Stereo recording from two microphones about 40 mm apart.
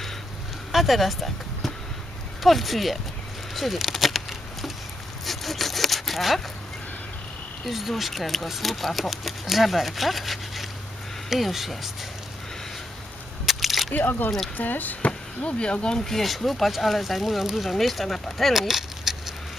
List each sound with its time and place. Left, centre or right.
0.7 s speech: centre
3.5 s a sound: centre
5.2 s sawing: centre
7.6 s speech: centre
13.4 s a sound: centre
13.9 s speech: left
14.3 s speech: centre
14.5 s speech: left
15.0 s speech: left
16.0 s speech: centre
18.7 s a sound: centre